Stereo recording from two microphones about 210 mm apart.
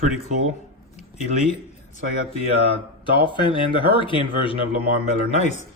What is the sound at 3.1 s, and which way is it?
Speech, 25° left (ahead or behind).